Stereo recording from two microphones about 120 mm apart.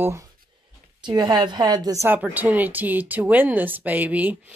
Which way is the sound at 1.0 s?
35° right (ahead or behind).